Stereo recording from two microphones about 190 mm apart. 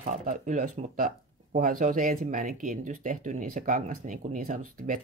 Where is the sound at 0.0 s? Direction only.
40° right (ahead or behind).